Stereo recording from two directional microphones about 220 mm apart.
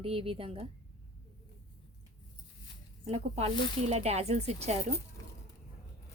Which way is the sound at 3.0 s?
30° right (ahead or behind).